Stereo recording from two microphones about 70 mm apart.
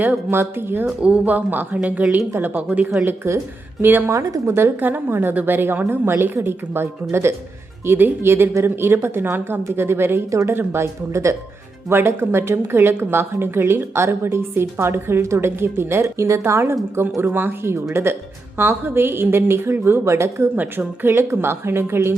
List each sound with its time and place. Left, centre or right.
0.3 s speech: right
0.9 s speech: centre
3.2 s speech: right
3.8 s speech: right
4.1 s speech: right
20.6 s speech: right